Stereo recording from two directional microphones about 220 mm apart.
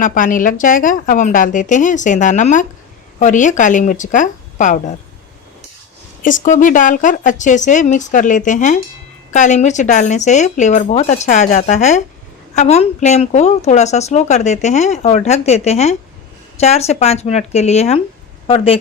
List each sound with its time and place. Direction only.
0.0 s speech: 35° left (ahead or behind)
6.2 s speech: 35° left (ahead or behind)